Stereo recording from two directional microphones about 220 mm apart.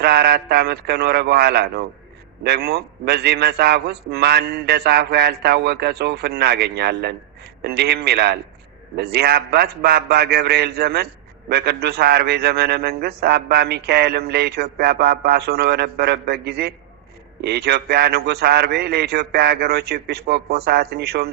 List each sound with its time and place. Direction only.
0.0 s a man's voice: 45° right (ahead or behind)